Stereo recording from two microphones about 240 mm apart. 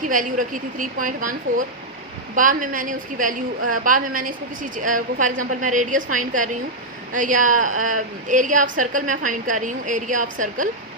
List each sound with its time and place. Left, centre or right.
0.0 s a woman's voice: right